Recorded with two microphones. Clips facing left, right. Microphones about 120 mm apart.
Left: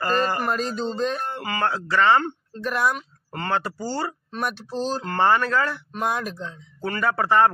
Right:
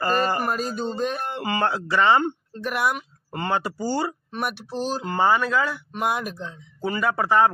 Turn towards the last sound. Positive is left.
turn(degrees=-5)  # may be behind; listen again after turning